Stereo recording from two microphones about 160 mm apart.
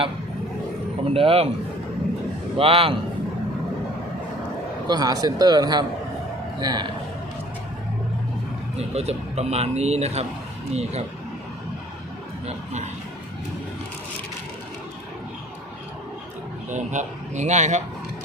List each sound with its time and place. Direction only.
1.1 s speech: 35° right (ahead or behind)
2.6 s speech: 35° right (ahead or behind)
4.9 s speech: 25° right (ahead or behind)
8.8 s speech: 40° right (ahead or behind)
12.5 s speech: 45° right (ahead or behind)
16.6 s speech: 50° right (ahead or behind)